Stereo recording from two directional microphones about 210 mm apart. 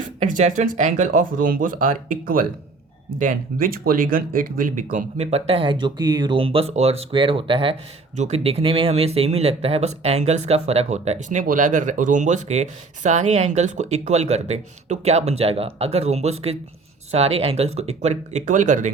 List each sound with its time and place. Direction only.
0.2 s speech: 35° right (ahead or behind)